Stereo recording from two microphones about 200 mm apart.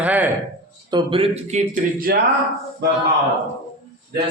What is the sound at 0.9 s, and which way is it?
Speech, 25° right (ahead or behind).